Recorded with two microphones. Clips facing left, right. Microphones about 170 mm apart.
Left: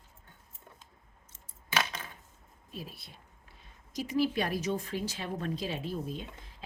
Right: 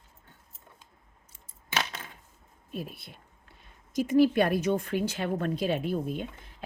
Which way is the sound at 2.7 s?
55° right (ahead or behind).